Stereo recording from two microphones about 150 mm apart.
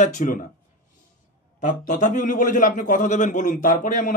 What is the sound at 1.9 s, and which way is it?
A man's voice, 60° left (ahead or behind).